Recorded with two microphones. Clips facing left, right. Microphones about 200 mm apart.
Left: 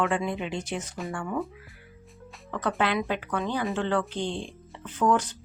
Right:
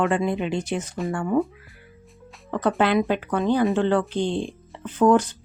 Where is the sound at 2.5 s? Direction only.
35° right (ahead or behind).